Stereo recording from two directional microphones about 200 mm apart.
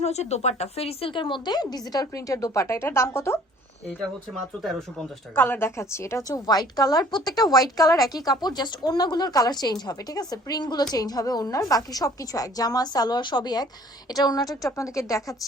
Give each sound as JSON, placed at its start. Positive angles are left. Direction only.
{"t": 0.0, "sound": "a woman's voice", "side_deg": 35}
{"t": 4.6, "sound": "a woman's voice", "side_deg": 0}